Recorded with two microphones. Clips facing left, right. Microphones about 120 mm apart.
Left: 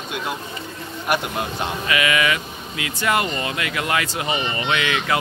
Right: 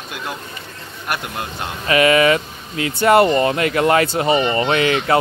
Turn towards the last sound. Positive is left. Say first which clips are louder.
# right 6 dB
turn(degrees=-35)  # may be behind; listen again after turning